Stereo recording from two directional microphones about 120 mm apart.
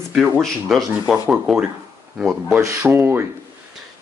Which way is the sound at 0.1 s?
Centre (ahead or behind).